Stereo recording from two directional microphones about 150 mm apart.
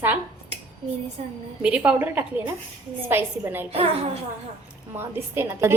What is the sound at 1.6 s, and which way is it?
A woman's voice, 10° right (ahead or behind).